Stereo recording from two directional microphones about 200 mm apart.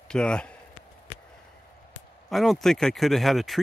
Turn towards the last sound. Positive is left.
turn(degrees=0)  # may be behind; listen again after turning